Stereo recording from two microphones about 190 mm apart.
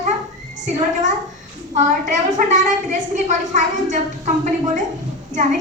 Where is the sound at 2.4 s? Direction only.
40° right (ahead or behind).